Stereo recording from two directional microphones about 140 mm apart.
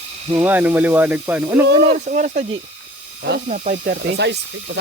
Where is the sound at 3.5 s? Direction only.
80° right.